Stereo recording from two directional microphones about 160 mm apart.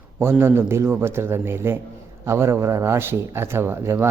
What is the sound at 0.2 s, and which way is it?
A man's voice, 15° right (ahead or behind).